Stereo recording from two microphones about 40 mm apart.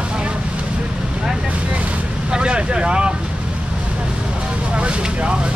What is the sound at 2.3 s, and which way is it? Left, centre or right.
Speech, right.